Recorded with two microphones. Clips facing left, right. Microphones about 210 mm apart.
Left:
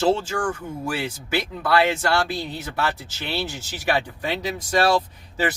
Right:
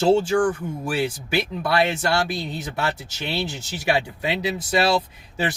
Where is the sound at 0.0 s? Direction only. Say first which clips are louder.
Right 4 dB; 15° right (ahead or behind).